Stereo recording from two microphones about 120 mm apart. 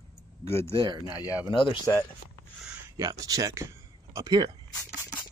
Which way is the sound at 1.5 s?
45° left (ahead or behind).